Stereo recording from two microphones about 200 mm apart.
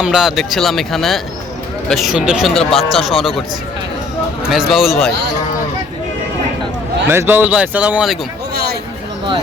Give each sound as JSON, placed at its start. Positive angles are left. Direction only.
{"t": 0.0, "sound": "speech", "side_deg": -5}
{"t": 4.5, "sound": "speech", "side_deg": 0}
{"t": 7.1, "sound": "speech", "side_deg": -10}
{"t": 8.5, "sound": "a sound", "side_deg": -50}